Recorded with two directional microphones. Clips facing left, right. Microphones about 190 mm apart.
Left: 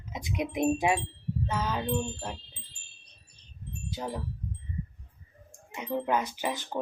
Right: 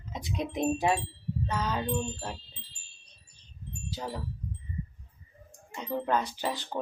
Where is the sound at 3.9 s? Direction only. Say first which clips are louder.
Left 2 dB; 20° left (ahead or behind).